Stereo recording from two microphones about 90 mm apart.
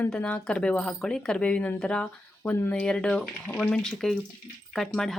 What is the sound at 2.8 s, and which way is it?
Speech, 10° left (ahead or behind).